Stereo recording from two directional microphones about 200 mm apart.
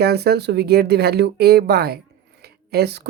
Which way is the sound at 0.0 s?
55° right (ahead or behind).